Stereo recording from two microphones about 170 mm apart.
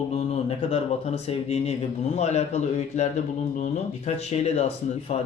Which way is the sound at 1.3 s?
35° left (ahead or behind).